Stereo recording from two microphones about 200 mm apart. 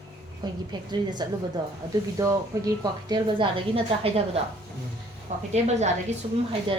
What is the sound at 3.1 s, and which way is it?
A woman's voice, 25° right (ahead or behind).